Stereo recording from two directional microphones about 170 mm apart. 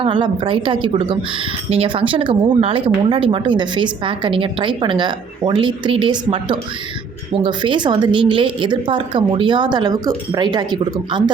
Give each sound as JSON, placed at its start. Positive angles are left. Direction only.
{"t": 0.0, "sound": "a woman's voice", "side_deg": -30}